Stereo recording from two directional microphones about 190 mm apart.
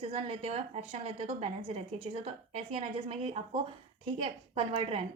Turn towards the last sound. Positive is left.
turn(degrees=-30)  # may be behind; listen again after turning